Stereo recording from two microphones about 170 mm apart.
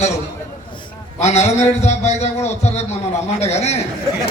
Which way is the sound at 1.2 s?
40° left (ahead or behind).